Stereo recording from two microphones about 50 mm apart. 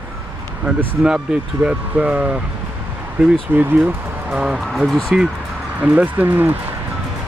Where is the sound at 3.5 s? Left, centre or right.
Right.